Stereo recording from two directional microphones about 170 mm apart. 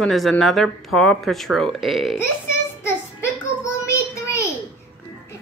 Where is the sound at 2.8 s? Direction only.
15° left (ahead or behind).